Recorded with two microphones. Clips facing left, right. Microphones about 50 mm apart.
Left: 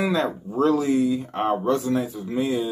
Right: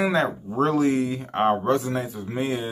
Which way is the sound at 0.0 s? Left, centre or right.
Right.